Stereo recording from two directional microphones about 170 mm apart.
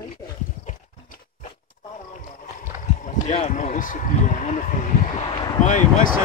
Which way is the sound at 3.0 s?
45° left (ahead or behind).